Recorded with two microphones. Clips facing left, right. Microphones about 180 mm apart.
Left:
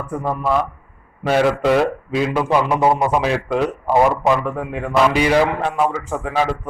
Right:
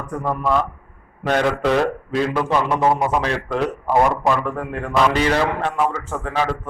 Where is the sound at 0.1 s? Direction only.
5° left (ahead or behind).